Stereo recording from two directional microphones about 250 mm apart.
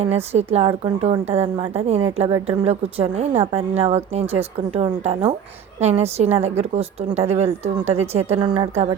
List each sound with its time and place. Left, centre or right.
0.0 s a woman's voice: right